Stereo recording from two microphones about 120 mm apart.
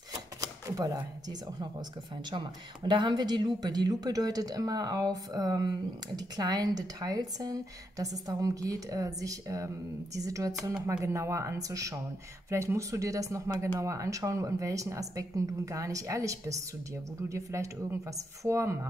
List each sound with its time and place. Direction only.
0.4 s a woman's voice: 30° right (ahead or behind)